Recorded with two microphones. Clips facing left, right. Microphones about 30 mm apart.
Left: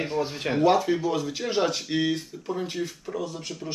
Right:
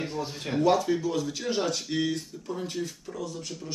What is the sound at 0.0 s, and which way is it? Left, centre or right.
Speech, left.